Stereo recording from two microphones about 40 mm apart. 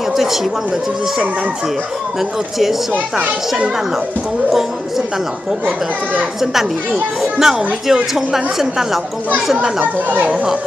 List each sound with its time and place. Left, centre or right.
4.5 s a sound: centre
6.4 s speech: centre
10.0 s speech: right